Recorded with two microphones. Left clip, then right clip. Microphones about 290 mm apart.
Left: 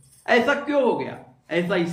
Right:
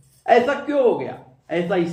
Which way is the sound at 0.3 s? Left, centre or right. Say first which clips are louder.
Right 3 dB; centre.